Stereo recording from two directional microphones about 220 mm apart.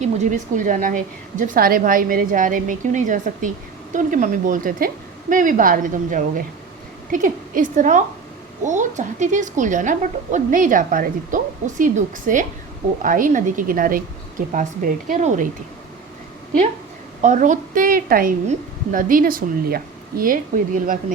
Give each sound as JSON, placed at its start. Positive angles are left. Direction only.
{"t": 0.0, "sound": "speech", "side_deg": -35}
{"t": 17.2, "sound": "speech", "side_deg": -35}